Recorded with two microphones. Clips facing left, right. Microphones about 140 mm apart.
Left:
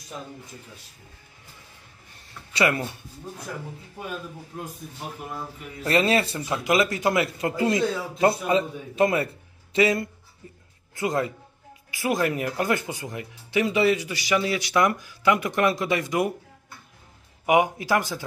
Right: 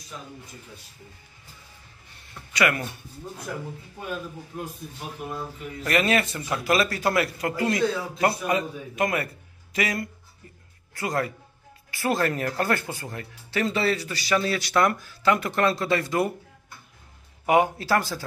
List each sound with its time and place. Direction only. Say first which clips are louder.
2.5 s speech: left 1 dB; 25° left (ahead or behind)
5.9 s speech: left 2 dB; 30° left (ahead or behind)
17.5 s speech: even; 15° left (ahead or behind)